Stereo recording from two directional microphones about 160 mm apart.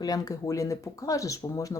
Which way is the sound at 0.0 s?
25° left (ahead or behind).